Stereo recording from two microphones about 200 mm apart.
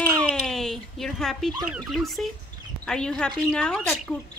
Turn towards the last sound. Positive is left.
turn(degrees=5)  # may be behind; listen again after turning